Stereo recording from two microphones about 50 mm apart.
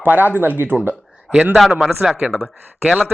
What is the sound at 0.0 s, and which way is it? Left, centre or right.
Speech, right.